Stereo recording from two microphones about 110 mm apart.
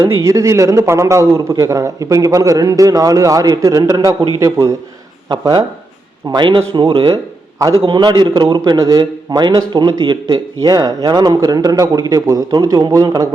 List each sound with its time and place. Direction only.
0.0 s a man's voice: 30° right (ahead or behind)
5.3 s a man's voice: 45° right (ahead or behind)